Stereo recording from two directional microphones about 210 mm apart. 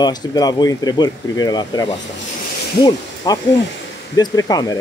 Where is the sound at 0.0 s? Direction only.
20° left (ahead or behind).